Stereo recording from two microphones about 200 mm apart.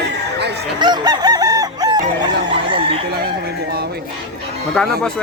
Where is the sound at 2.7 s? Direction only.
25° right (ahead or behind).